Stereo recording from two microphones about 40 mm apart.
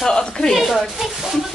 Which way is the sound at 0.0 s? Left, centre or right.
Centre.